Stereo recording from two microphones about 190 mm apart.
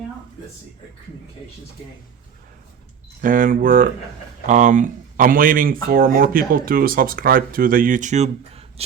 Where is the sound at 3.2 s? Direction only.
45° right (ahead or behind).